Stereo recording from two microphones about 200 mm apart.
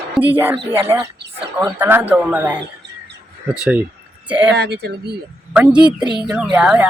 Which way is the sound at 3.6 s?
5° right (ahead or behind).